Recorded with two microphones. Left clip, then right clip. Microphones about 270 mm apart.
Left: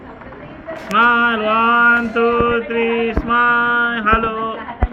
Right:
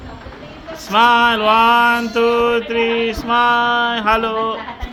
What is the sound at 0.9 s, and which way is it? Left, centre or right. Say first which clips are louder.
Mantra: right 1 dB; centre.